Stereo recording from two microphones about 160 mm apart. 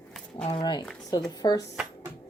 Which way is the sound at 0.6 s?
25° left (ahead or behind).